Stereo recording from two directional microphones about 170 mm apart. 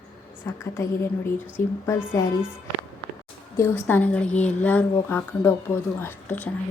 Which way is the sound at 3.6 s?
10° left (ahead or behind).